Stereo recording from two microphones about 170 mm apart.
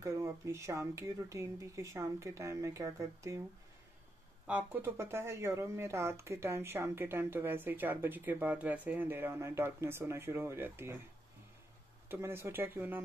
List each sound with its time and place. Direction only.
0.0 s speech: 15° right (ahead or behind)
4.5 s speech: 10° right (ahead or behind)
12.1 s speech: 15° right (ahead or behind)